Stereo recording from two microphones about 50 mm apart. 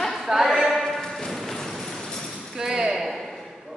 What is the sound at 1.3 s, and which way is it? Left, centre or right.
Vehicle, centre.